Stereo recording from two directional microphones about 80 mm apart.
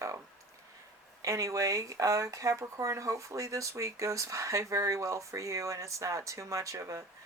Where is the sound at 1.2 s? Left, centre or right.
Right.